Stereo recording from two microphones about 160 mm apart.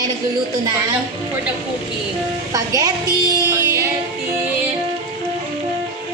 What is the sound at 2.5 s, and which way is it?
A woman's voice, 20° right (ahead or behind).